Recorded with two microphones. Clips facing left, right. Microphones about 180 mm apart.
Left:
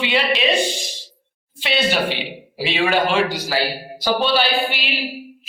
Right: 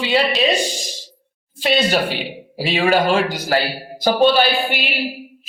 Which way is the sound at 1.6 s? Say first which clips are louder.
Right 3 dB; 40° right (ahead or behind).